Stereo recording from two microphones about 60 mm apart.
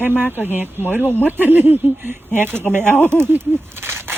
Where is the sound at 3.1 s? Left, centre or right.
Right.